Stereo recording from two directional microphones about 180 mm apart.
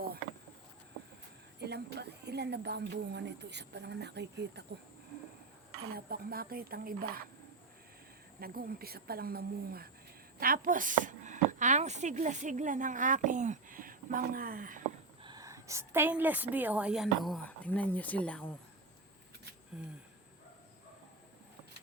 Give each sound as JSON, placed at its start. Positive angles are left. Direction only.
{"t": 1.5, "sound": "speech", "side_deg": -65}
{"t": 5.9, "sound": "a woman's voice", "side_deg": -55}
{"t": 8.4, "sound": "a woman's voice", "side_deg": -55}
{"t": 15.2, "sound": "a woman's voice", "side_deg": -20}
{"t": 19.7, "sound": "a sound", "side_deg": -5}